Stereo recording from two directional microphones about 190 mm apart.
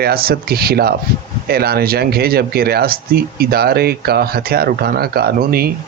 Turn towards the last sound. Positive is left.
turn(degrees=-55)  # may be behind; listen again after turning